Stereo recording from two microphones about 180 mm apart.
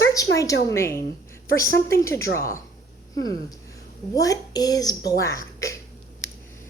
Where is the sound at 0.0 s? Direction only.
20° left (ahead or behind).